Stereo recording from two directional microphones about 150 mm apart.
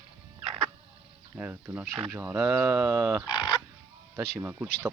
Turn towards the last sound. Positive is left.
turn(degrees=-10)  # may be behind; listen again after turning